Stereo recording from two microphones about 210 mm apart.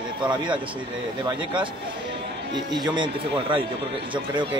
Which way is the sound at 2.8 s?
25° right (ahead or behind).